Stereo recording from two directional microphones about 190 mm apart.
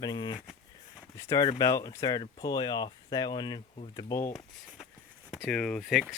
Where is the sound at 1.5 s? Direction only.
15° left (ahead or behind).